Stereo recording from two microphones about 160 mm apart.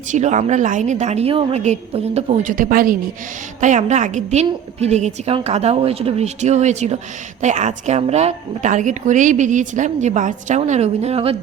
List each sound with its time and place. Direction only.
0.1 s a woman's voice: 50° right (ahead or behind)
3.6 s a woman's voice: 50° right (ahead or behind)